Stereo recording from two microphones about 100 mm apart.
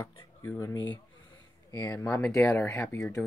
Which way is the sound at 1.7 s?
40° left (ahead or behind).